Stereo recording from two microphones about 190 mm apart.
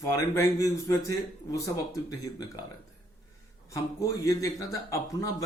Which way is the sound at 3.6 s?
15° left (ahead or behind).